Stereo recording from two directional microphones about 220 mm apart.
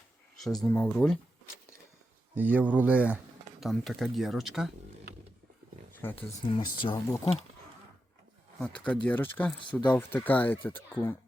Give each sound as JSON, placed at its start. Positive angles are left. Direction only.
{"t": 0.6, "sound": "speech", "side_deg": 5}
{"t": 2.3, "sound": "speech", "side_deg": -5}
{"t": 6.0, "sound": "speech", "side_deg": 10}
{"t": 6.5, "sound": "speech", "side_deg": 20}
{"t": 8.5, "sound": "speech", "side_deg": 5}